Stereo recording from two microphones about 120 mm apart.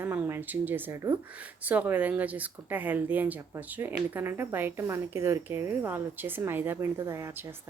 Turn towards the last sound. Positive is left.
turn(degrees=-25)  # may be behind; listen again after turning